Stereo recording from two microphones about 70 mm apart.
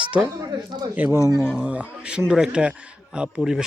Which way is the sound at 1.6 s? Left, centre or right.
Centre.